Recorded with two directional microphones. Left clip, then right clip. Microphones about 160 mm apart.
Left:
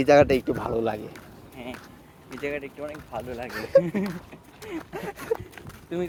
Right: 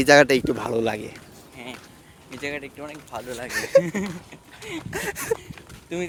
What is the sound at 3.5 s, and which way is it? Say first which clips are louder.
Speech: right 2 dB; 50° right (ahead or behind).